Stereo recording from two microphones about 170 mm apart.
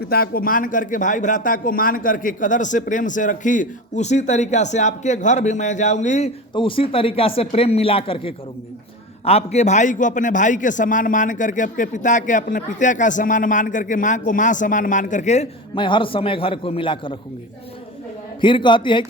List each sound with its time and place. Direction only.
0.0 s a man's voice: 65° left (ahead or behind); by 6.3 s 45° left (ahead or behind)
6.5 s a man's voice: 30° left (ahead or behind)
15.7 s speech: 30° left (ahead or behind)
18.3 s a man's voice: 30° left (ahead or behind)